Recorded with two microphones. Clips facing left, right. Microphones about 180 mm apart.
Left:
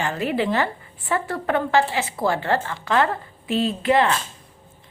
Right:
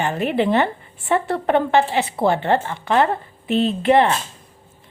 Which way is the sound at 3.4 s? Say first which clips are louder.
Right 3 dB; 60° right (ahead or behind).